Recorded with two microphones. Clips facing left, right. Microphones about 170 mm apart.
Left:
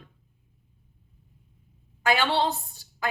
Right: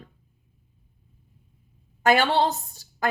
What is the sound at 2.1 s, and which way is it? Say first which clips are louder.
A woman's voice: right 4 dB; 45° right (ahead or behind).